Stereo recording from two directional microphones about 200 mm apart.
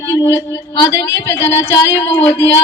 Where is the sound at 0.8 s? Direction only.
15° left (ahead or behind).